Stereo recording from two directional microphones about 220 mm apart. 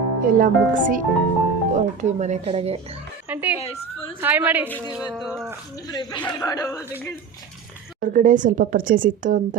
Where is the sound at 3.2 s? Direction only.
10° right (ahead or behind).